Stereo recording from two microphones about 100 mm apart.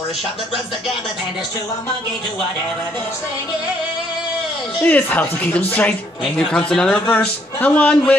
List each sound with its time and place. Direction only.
4.8 s a man's voice: 15° left (ahead or behind)